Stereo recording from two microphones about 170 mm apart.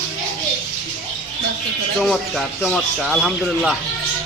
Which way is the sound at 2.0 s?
5° left (ahead or behind).